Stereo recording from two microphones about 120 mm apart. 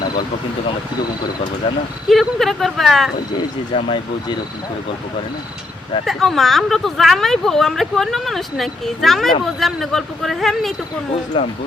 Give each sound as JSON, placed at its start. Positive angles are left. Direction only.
{"t": 1.6, "sound": "speech", "side_deg": 40}
{"t": 2.0, "sound": "speech", "side_deg": 0}
{"t": 3.8, "sound": "speech", "side_deg": 50}
{"t": 6.1, "sound": "speech", "side_deg": 0}
{"t": 11.3, "sound": "speech", "side_deg": 45}